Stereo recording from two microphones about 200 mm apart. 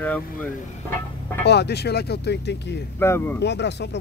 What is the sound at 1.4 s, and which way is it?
Speech, 55° left (ahead or behind).